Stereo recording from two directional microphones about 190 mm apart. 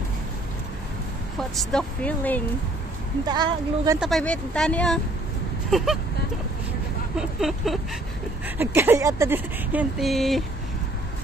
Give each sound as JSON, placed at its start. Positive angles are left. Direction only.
{"t": 1.6, "sound": "speech", "side_deg": 5}
{"t": 3.3, "sound": "a woman's voice", "side_deg": -20}
{"t": 4.0, "sound": "speech", "side_deg": 5}
{"t": 7.2, "sound": "speech", "side_deg": 0}